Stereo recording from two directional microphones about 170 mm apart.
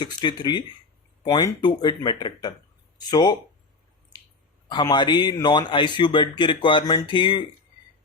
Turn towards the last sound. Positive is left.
turn(degrees=25)  # may be behind; listen again after turning